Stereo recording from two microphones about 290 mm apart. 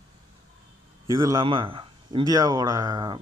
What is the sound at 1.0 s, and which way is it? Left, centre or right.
Speech, centre.